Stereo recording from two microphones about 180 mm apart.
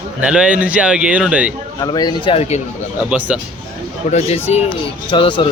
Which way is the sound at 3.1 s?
5° right (ahead or behind).